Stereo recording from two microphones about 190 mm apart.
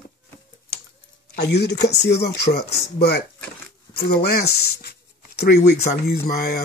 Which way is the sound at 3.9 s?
55° left (ahead or behind).